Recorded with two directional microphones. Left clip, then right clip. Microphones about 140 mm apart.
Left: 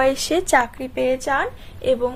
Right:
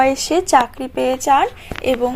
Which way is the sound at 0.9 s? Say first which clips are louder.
Right 2 dB; 30° right (ahead or behind).